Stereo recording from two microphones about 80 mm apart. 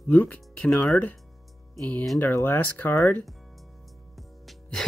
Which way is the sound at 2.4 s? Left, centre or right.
Left.